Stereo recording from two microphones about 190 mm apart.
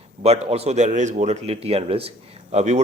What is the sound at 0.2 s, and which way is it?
Speech, 35° right (ahead or behind).